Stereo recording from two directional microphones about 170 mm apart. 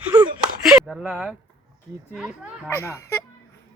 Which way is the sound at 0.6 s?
Centre (ahead or behind).